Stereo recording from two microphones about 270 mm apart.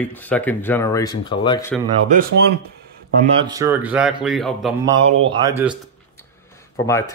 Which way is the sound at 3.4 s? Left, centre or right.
Centre.